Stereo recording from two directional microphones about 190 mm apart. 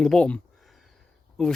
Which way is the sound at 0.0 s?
5° left (ahead or behind).